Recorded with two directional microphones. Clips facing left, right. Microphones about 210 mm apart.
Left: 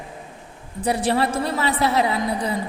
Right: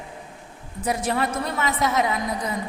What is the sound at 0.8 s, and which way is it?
A woman's voice, 30° left (ahead or behind).